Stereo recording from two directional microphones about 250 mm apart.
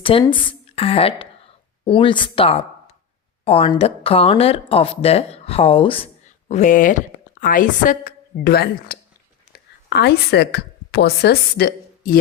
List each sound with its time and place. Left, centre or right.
0.0 s a woman's voice: left